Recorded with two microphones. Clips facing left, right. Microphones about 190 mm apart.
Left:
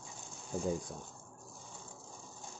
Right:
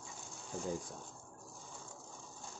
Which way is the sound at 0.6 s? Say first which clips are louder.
Left 4 dB; 15° left (ahead or behind).